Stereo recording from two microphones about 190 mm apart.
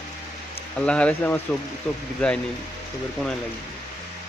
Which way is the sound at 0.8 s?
5° left (ahead or behind).